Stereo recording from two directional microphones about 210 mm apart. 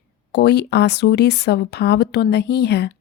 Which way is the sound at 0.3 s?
50° left (ahead or behind).